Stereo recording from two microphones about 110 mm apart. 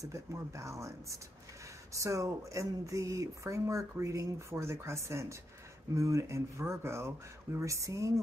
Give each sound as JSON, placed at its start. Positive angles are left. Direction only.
{"t": 0.0, "sound": "speech", "side_deg": -30}